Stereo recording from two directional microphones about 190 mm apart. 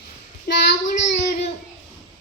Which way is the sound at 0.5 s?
55° left (ahead or behind).